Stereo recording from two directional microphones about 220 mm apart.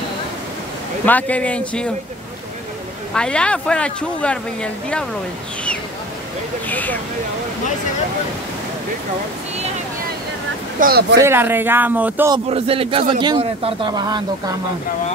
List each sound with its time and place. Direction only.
1.0 s speech: 5° left (ahead or behind)
3.2 s speech: 5° left (ahead or behind)
6.7 s speech: 5° left (ahead or behind)
10.8 s speech: 45° right (ahead or behind)
11.1 s a man's voice: 10° right (ahead or behind)
12.4 s speech: 25° right (ahead or behind)